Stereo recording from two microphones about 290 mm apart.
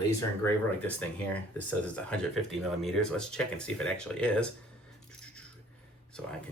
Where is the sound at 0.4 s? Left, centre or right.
Centre.